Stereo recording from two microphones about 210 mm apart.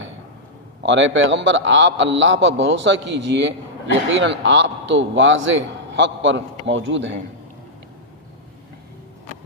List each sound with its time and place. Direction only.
0.8 s a man's voice: 60° right (ahead or behind)